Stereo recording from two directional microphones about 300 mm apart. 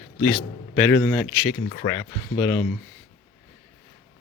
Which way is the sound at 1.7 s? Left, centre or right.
Centre.